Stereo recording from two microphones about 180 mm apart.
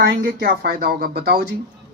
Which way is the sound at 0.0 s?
60° right (ahead or behind).